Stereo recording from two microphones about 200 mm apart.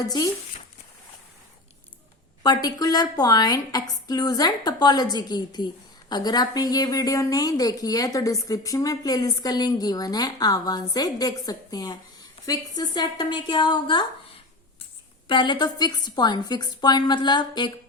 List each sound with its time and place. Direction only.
0.0 s speech: 20° left (ahead or behind)
2.4 s speech: 20° left (ahead or behind)
15.3 s speech: 25° left (ahead or behind)